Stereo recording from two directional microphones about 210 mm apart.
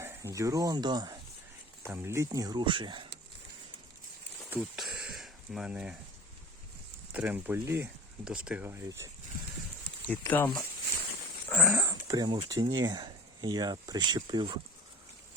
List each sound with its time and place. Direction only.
0.0 s speech: 10° right (ahead or behind)
4.5 s a sound: centre (ahead or behind)
7.1 s speech: 5° right (ahead or behind)
10.1 s speech: 10° left (ahead or behind)
11.4 s dog: 5° left (ahead or behind)
11.8 s speech: 15° right (ahead or behind)